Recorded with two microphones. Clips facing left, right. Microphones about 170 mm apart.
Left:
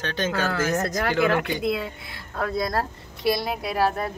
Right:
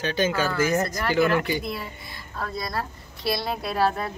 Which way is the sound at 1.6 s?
65° left (ahead or behind).